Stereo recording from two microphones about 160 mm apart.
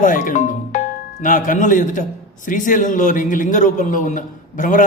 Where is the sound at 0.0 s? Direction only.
55° left (ahead or behind).